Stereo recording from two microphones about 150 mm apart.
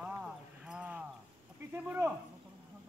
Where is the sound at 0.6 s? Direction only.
10° right (ahead or behind).